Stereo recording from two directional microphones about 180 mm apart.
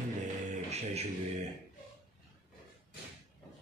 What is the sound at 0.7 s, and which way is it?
Speech, 35° right (ahead or behind).